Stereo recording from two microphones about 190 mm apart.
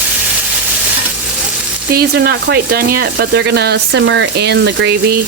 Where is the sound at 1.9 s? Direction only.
55° right (ahead or behind).